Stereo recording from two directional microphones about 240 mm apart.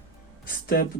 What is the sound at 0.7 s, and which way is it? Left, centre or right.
Speech, left.